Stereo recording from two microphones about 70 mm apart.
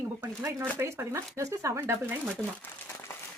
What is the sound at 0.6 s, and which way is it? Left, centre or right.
Speech, right.